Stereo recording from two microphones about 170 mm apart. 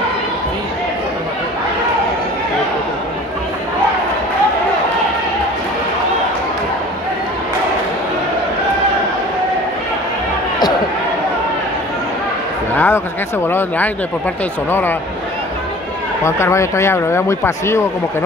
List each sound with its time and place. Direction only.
12.7 s a sound: 10° left (ahead or behind)
13.5 s speech: 10° left (ahead or behind)
16.3 s speech: 15° left (ahead or behind)